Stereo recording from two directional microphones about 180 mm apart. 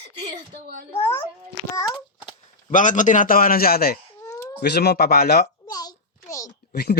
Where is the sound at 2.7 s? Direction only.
45° left (ahead or behind).